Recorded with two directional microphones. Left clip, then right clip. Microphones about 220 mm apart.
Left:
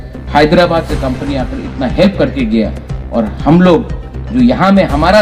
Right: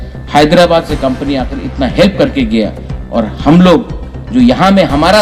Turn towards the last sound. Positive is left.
turn(degrees=-40)  # may be behind; listen again after turning